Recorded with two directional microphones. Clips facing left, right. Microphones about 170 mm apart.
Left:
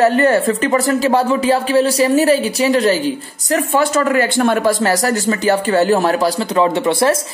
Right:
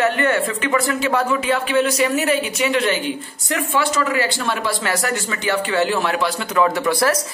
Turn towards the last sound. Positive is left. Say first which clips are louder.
# left 4 dB
turn(degrees=25)  # may be behind; listen again after turning